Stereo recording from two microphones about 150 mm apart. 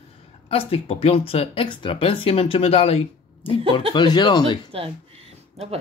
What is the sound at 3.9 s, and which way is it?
Speech, 30° left (ahead or behind).